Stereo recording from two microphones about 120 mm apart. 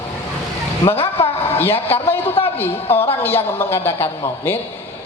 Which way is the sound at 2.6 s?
55° left (ahead or behind).